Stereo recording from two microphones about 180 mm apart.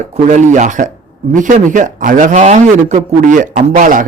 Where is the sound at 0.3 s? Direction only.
40° right (ahead or behind).